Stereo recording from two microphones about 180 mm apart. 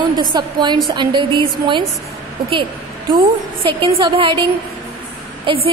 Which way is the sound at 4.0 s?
30° right (ahead or behind).